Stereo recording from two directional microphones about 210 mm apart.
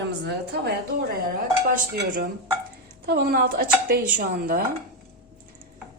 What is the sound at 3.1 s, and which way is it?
A woman's voice, 50° right (ahead or behind).